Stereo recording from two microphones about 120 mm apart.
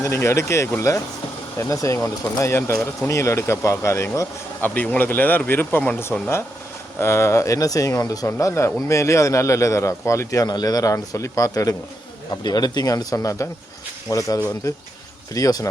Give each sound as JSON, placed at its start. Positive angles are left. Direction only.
{"t": 0.0, "sound": "speech", "side_deg": 20}